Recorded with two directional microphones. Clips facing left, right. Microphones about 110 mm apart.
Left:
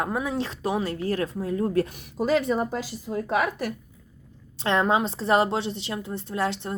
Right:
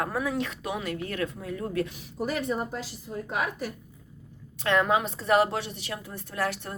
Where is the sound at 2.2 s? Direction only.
90° left.